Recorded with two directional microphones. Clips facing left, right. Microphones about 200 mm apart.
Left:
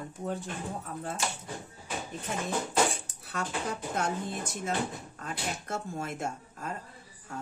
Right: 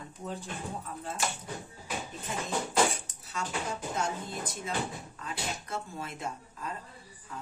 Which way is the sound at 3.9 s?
55° left (ahead or behind).